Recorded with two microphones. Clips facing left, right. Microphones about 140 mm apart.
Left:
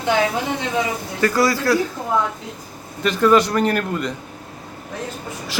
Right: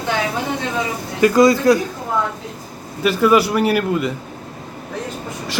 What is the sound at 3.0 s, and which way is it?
A man's voice, 10° right (ahead or behind).